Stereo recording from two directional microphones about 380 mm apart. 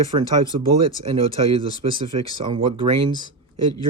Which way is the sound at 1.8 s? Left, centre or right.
Centre.